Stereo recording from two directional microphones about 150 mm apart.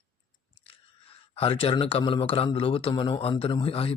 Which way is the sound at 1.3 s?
35° left (ahead or behind).